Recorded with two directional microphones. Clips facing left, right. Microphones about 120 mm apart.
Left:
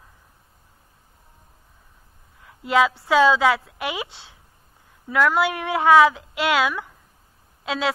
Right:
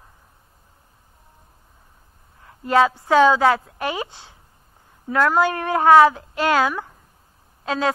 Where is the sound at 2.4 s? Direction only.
35° right (ahead or behind).